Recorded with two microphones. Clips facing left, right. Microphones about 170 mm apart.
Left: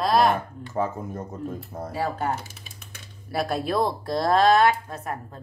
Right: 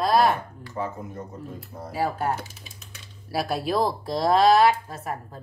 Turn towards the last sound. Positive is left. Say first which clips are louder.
# even
turn(degrees=0)  # may be behind; listen again after turning